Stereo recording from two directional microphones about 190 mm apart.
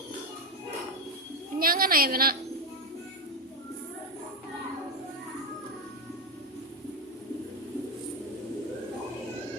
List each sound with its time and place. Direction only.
1.5 s a woman's voice: 50° right (ahead or behind)